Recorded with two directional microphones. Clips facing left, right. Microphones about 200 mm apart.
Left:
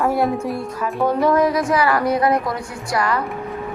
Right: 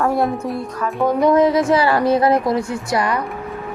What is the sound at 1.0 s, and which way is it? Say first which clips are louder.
Speech: right 3 dB; 20° right (ahead or behind).